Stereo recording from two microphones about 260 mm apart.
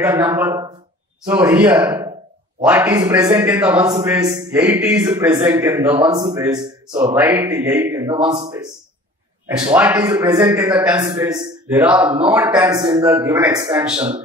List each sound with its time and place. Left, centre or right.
0.0 s speech: centre
9.8 s speech: centre
13.9 s speech: right